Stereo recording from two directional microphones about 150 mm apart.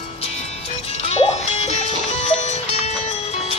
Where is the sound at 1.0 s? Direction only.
40° left (ahead or behind).